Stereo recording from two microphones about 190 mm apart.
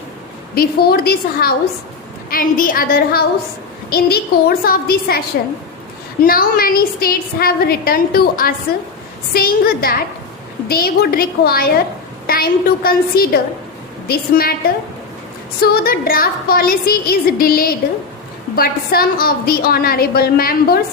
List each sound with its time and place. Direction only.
0.5 s a woman's voice: 55° left (ahead or behind)
6.2 s a woman's voice: 50° left (ahead or behind)
15.6 s a woman's voice: 55° left (ahead or behind)